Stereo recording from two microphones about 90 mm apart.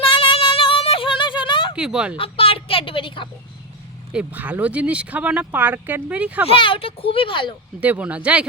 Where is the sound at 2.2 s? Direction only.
90° left; by 3.3 s 65° left (ahead or behind).